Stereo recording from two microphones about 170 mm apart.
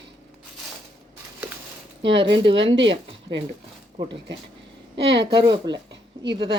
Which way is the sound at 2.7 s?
90° right.